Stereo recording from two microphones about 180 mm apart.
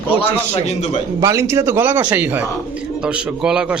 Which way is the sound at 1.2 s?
15° right (ahead or behind).